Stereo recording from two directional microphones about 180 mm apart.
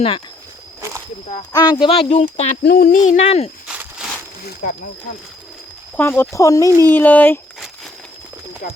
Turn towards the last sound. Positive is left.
turn(degrees=10)  # may be behind; listen again after turning